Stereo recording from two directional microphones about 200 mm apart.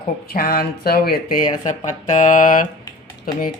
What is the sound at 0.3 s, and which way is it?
Speech, 45° left (ahead or behind).